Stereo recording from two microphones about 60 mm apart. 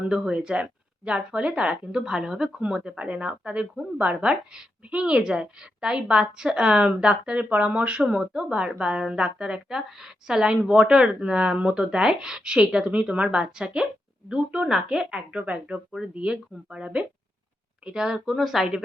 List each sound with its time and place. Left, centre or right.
0.0 s speech: centre